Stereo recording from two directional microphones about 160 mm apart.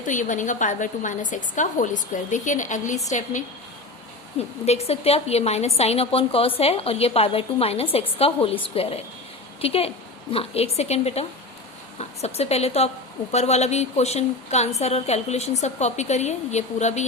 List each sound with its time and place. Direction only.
0.0 s a woman's voice: 50° left (ahead or behind)